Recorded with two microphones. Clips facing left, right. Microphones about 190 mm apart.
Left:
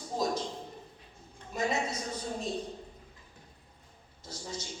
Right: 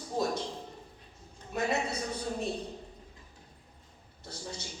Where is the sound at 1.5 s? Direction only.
60° right (ahead or behind).